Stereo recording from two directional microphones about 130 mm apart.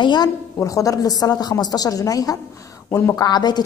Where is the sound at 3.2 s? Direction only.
35° left (ahead or behind).